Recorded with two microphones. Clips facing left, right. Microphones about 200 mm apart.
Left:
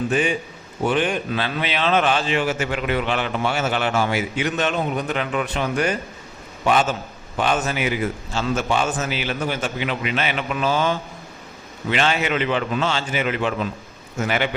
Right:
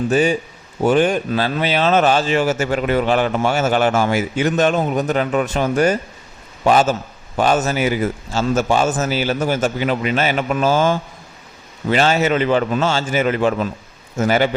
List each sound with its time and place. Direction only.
0.1 s a man's voice: 40° right (ahead or behind)